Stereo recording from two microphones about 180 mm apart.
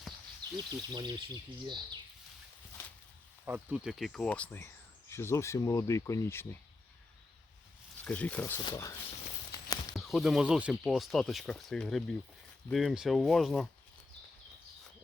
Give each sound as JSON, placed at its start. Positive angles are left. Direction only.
{"t": 0.5, "sound": "speech", "side_deg": -25}
{"t": 3.4, "sound": "speech", "side_deg": -10}
{"t": 8.0, "sound": "speech", "side_deg": 10}
{"t": 9.9, "sound": "speech", "side_deg": 0}